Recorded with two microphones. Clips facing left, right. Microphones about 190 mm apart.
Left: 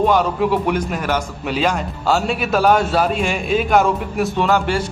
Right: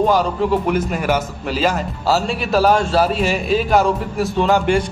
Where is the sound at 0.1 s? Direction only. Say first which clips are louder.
Even; centre (ahead or behind).